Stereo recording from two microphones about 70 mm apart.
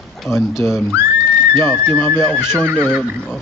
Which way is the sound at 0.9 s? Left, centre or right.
Right.